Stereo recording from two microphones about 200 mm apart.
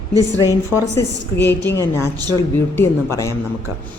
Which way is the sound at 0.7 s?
10° left (ahead or behind).